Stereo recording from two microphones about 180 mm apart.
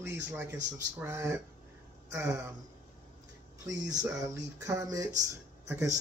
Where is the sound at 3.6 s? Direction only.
20° right (ahead or behind).